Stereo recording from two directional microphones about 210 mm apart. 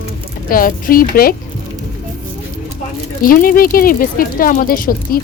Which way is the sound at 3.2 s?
45° left (ahead or behind).